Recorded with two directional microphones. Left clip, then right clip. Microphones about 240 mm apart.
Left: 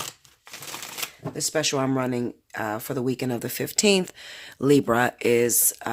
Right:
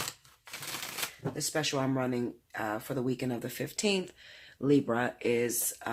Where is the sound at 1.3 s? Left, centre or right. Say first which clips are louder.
Left 8 dB; left.